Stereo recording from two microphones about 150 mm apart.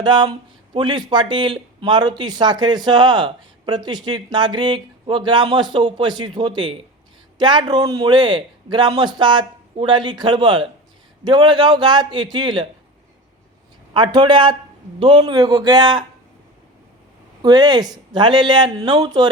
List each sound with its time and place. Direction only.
0.0 s speech: 30° right (ahead or behind)
13.9 s a man's voice: 30° right (ahead or behind)
17.4 s a man's voice: 25° right (ahead or behind)